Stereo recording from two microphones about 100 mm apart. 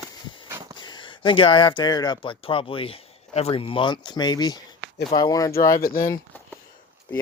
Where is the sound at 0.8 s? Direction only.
50° left (ahead or behind).